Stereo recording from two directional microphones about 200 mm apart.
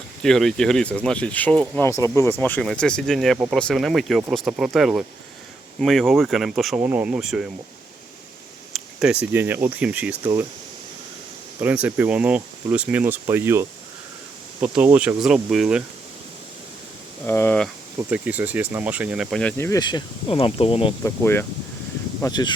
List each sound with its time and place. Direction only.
0.2 s speech: centre (ahead or behind)
8.7 s a sound: 5° right (ahead or behind)
9.3 s speech: 10° right (ahead or behind)
11.6 s speech: 10° right (ahead or behind)
17.2 s speech: 10° left (ahead or behind)
17.9 s speech: 5° right (ahead or behind); by 20.9 s 30° left (ahead or behind)
21.0 s speech: 10° left (ahead or behind)